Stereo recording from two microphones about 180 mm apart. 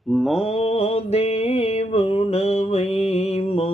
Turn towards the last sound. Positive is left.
turn(degrees=30)  # may be behind; listen again after turning